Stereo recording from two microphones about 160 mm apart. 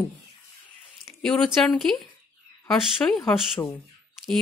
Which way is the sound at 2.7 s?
5° left (ahead or behind).